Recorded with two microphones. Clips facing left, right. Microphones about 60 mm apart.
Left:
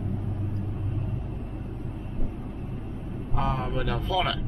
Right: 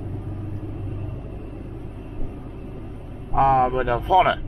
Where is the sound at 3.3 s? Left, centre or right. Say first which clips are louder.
Right 12 dB; right.